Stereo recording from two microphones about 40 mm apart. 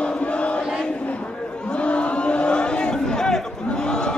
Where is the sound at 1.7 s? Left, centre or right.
Left.